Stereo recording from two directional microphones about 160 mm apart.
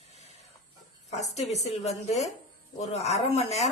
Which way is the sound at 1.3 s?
45° left (ahead or behind).